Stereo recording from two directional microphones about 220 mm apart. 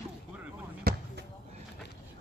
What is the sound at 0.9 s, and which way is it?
Basketball bounce, 45° right (ahead or behind).